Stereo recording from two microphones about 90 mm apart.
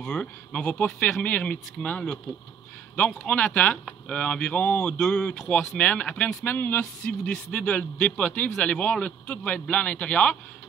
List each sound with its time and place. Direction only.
0.0 s speech: 10° left (ahead or behind)